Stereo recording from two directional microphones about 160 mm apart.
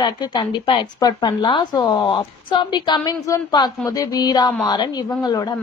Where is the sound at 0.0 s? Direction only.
25° left (ahead or behind).